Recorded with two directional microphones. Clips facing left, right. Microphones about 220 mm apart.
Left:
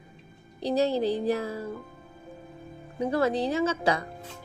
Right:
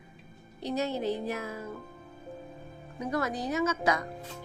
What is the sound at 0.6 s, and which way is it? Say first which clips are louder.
Speech: left 6 dB; 35° left (ahead or behind).